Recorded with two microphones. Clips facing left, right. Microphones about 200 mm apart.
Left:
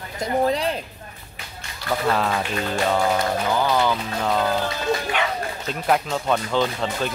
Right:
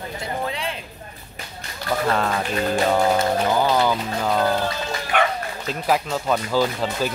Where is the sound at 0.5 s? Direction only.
40° left (ahead or behind).